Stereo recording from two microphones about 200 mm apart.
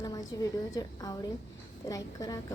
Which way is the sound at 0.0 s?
20° left (ahead or behind).